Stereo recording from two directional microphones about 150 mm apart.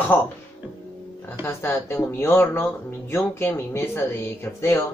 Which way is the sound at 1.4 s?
20° left (ahead or behind).